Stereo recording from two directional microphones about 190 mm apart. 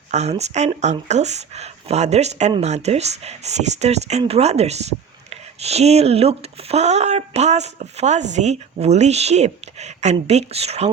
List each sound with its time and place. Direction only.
0.1 s speech: 35° right (ahead or behind)